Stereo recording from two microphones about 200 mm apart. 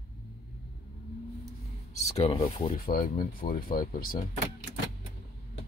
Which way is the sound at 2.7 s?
45° left (ahead or behind).